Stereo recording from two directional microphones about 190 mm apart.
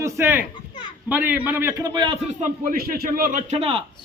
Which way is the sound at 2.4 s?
50° right (ahead or behind).